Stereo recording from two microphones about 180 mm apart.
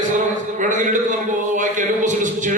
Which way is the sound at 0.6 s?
45° right (ahead or behind).